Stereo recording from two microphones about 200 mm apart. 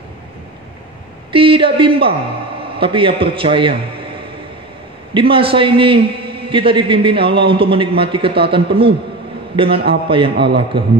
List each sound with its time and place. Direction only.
1.3 s a woman's voice: 25° right (ahead or behind)
5.1 s a man's voice: 25° right (ahead or behind)